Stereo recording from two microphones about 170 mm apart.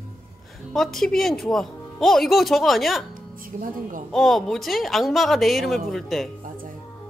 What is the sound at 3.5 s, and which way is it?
Speech, 50° right (ahead or behind).